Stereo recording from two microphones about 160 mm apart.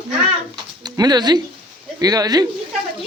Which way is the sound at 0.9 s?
25° right (ahead or behind).